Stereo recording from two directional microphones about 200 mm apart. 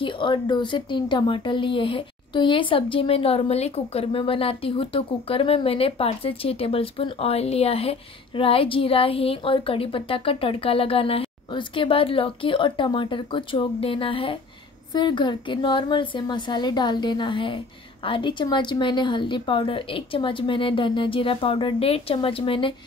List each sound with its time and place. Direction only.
0.0 s speech: 25° left (ahead or behind)